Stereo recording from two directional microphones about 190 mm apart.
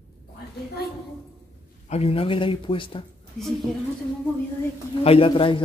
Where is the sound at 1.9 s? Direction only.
30° left (ahead or behind).